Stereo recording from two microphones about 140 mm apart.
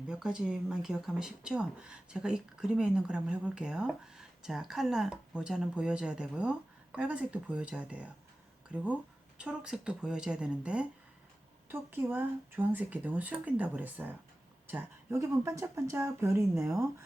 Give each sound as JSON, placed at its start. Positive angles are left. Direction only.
{"t": 0.1, "sound": "speech", "side_deg": -5}